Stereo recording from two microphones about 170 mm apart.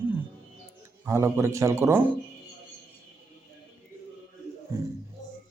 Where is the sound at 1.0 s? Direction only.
15° right (ahead or behind).